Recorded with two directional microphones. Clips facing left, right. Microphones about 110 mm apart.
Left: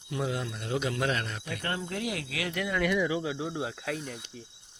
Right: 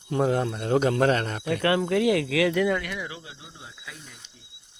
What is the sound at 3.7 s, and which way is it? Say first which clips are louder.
Speech: left 10 dB; 65° left (ahead or behind).